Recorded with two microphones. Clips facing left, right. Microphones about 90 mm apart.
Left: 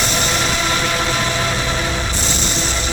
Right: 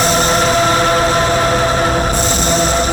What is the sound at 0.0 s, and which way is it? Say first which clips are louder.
Music: right 7 dB; 40° right (ahead or behind).